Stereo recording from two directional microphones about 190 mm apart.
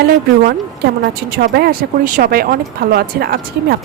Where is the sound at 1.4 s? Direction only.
55° right (ahead or behind).